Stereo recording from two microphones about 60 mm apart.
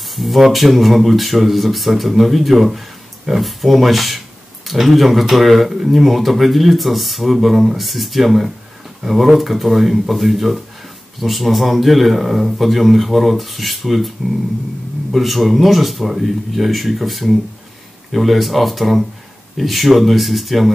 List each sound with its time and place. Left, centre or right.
0.0 s speech: centre